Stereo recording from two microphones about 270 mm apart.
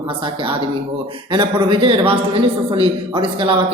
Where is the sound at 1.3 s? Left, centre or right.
Centre.